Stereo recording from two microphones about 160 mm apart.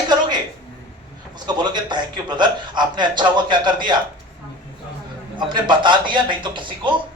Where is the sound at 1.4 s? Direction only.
25° right (ahead or behind).